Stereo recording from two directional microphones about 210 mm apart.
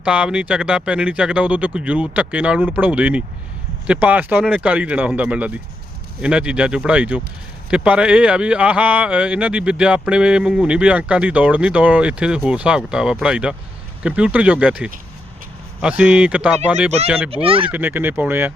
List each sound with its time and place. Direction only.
0.0 s speech: 5° right (ahead or behind)
17.3 s speech: 25° right (ahead or behind)
17.7 s speech: 10° right (ahead or behind)